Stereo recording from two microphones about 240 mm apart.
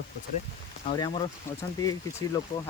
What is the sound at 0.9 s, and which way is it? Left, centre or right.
Speech, centre.